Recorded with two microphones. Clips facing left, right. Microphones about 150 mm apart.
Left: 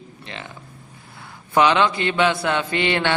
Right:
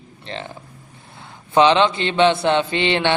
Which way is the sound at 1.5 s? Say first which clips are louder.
Right 3 dB; 25° right (ahead or behind).